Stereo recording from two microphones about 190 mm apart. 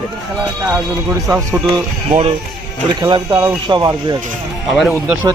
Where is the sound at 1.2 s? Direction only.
15° right (ahead or behind).